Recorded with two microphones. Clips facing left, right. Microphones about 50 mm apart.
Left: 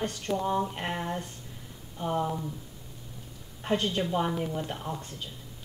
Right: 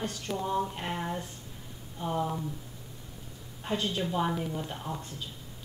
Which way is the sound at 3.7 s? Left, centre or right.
Left.